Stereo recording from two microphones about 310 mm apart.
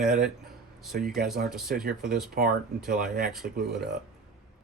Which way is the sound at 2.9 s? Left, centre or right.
Right.